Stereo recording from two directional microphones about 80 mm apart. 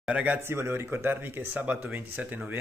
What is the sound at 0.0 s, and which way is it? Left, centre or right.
Speech, centre.